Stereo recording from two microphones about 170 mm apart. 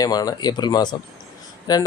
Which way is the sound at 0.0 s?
20° left (ahead or behind).